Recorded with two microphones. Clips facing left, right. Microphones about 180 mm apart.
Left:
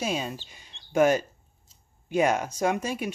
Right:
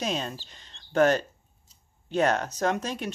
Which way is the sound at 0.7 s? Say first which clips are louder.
Even; 10° left (ahead or behind).